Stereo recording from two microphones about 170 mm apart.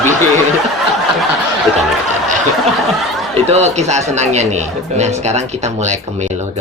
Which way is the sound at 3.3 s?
40° right (ahead or behind).